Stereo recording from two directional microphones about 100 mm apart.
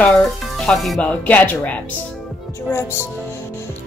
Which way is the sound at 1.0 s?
15° left (ahead or behind).